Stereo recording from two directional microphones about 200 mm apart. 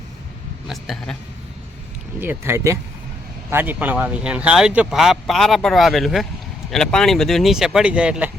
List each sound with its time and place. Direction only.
0.7 s speech: centre (ahead or behind)
2.2 s speech: 10° right (ahead or behind)